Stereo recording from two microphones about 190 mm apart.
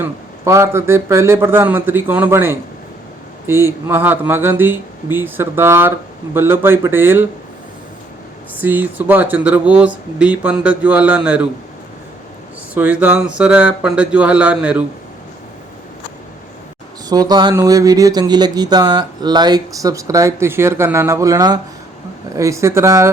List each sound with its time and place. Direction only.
0.0 s speech: 15° right (ahead or behind)
8.5 s speech: 10° right (ahead or behind)
12.7 s speech: 10° right (ahead or behind)
17.1 s speech: 20° right (ahead or behind)